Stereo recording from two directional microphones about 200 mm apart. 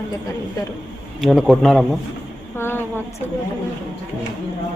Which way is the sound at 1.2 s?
Centre (ahead or behind).